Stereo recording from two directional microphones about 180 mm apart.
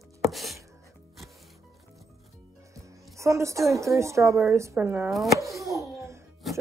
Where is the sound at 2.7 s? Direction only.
15° right (ahead or behind).